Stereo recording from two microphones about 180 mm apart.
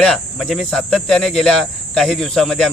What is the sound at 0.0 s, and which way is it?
Speech, 5° left (ahead or behind).